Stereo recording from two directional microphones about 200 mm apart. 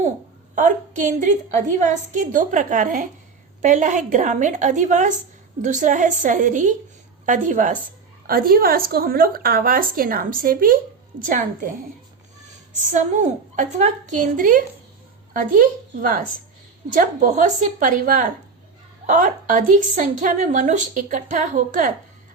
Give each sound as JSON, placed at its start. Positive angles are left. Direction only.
{"t": 0.5, "sound": "a woman's voice", "side_deg": -40}
{"t": 12.7, "sound": "a woman's voice", "side_deg": -35}